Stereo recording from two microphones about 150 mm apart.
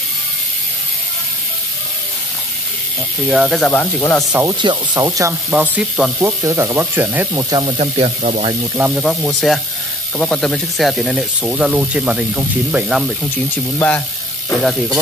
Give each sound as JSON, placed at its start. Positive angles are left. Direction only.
{"t": 3.3, "sound": "speech", "side_deg": -5}
{"t": 3.7, "sound": "speech", "side_deg": 10}
{"t": 4.2, "sound": "speech", "side_deg": -5}
{"t": 4.6, "sound": "speech", "side_deg": -30}
{"t": 5.5, "sound": "speech", "side_deg": -5}
{"t": 6.1, "sound": "speech", "side_deg": -20}
{"t": 7.5, "sound": "speech", "side_deg": -40}
{"t": 8.7, "sound": "speech", "side_deg": -5}
{"t": 13.7, "sound": "speech", "side_deg": 15}
{"t": 14.6, "sound": "speech", "side_deg": 0}